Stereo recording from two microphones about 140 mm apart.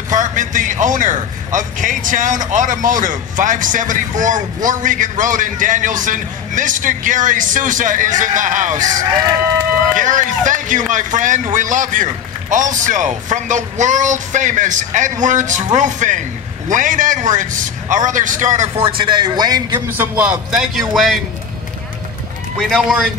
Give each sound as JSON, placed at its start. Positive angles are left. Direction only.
{"t": 0.1, "sound": "a man's voice", "side_deg": -65}
{"t": 9.9, "sound": "a man's voice", "side_deg": -65}
{"t": 18.8, "sound": "a man's voice", "side_deg": -40}
{"t": 19.9, "sound": "a man's voice", "side_deg": -10}
{"t": 22.6, "sound": "a man's voice", "side_deg": 5}